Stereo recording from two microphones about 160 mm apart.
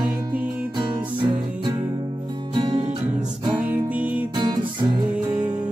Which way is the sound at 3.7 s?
10° right (ahead or behind).